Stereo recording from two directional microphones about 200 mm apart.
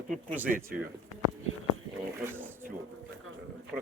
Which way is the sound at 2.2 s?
10° right (ahead or behind).